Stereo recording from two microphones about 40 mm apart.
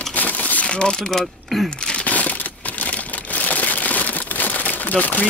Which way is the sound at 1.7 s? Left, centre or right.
Left.